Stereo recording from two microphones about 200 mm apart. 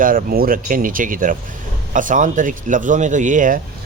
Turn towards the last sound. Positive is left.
turn(degrees=-40)  # may be behind; listen again after turning